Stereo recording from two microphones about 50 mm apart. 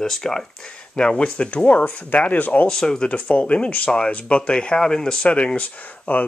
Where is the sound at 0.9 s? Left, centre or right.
Left.